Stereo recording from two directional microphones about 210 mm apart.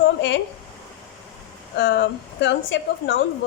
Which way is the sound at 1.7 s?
55° left (ahead or behind).